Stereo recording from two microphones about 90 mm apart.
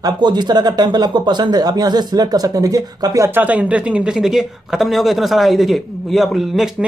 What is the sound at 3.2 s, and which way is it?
Speech, 20° right (ahead or behind).